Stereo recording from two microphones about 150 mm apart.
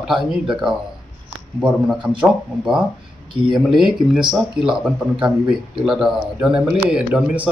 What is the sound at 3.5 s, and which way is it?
Speech, 5° right (ahead or behind).